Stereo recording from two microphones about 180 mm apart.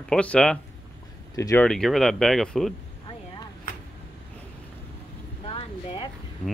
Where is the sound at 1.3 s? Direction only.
20° left (ahead or behind).